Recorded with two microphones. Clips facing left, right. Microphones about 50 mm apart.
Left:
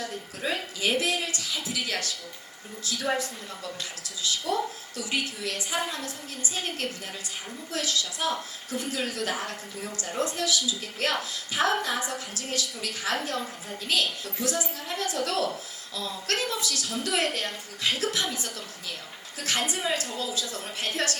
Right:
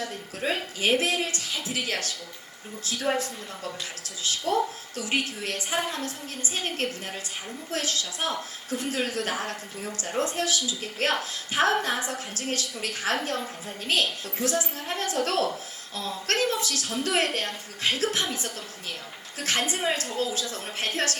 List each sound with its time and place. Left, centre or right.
0.0 s a woman's voice: right
19.4 s a woman's voice: right